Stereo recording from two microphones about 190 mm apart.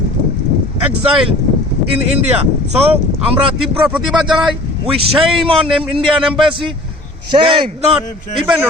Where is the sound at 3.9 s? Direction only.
Centre (ahead or behind).